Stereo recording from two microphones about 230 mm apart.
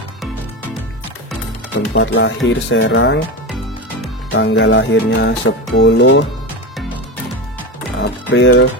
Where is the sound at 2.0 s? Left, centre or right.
Left.